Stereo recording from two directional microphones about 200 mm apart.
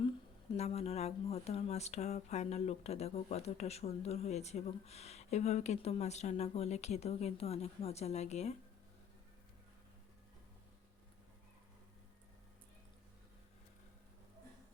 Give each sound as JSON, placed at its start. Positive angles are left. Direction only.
{"t": 0.5, "sound": "speech", "side_deg": 30}